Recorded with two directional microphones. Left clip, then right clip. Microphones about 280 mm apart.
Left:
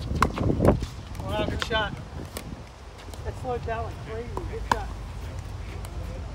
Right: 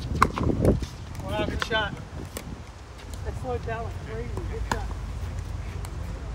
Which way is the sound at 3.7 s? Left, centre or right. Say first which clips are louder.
Left 2 dB; centre.